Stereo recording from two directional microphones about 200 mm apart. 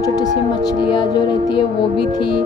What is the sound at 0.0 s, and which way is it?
Music, 20° left (ahead or behind).